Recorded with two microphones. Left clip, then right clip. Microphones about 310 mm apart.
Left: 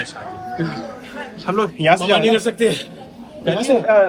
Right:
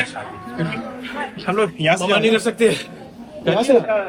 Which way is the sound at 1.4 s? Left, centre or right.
Centre.